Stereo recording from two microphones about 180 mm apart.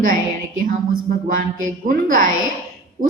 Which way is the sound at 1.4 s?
50° right (ahead or behind).